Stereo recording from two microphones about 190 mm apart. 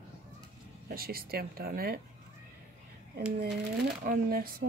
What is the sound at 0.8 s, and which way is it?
Speech, 50° right (ahead or behind).